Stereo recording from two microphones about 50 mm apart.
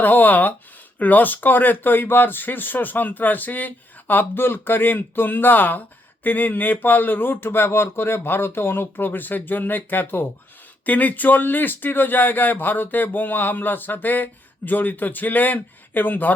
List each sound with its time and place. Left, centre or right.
0.0 s speech: left